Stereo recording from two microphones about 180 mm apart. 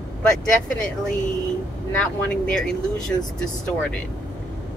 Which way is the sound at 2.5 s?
5° left (ahead or behind).